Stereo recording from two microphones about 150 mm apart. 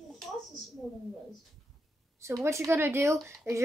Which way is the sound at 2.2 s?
20° right (ahead or behind).